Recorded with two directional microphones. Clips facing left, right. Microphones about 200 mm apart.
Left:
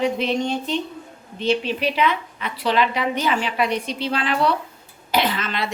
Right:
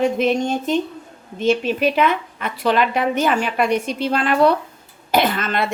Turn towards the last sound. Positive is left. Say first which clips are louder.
# right 4 dB
turn(degrees=-50)  # may be behind; listen again after turning